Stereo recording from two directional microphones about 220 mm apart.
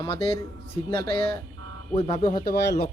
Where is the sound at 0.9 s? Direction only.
45° right (ahead or behind).